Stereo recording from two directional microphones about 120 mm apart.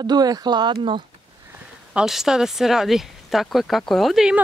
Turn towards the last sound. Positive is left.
turn(degrees=0)  # may be behind; listen again after turning